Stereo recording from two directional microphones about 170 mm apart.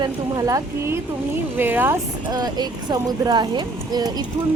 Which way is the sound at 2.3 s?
25° right (ahead or behind).